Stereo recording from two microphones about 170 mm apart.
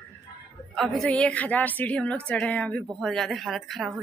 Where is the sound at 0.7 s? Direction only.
Centre (ahead or behind).